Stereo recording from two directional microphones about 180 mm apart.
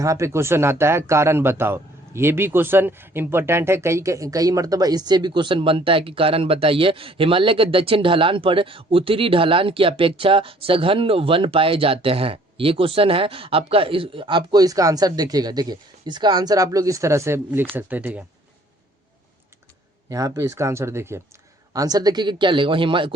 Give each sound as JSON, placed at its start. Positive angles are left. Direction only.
{"t": 0.0, "sound": "speech", "side_deg": -15}
{"t": 20.1, "sound": "speech", "side_deg": -20}